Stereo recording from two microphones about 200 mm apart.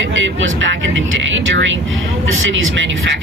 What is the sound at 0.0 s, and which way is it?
A woman's voice, 70° right (ahead or behind).